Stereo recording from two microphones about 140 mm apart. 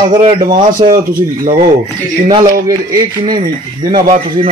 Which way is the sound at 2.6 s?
30° right (ahead or behind).